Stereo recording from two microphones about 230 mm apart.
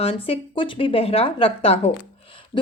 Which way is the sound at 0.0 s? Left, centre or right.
Left.